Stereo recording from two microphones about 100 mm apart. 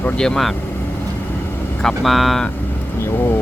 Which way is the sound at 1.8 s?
Centre (ahead or behind).